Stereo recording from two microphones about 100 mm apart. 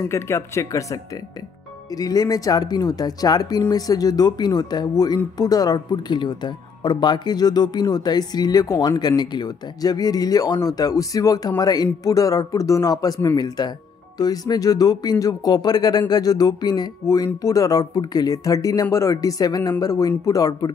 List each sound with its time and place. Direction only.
0.0 s speech: 30° left (ahead or behind)
2.0 s speech: 40° left (ahead or behind)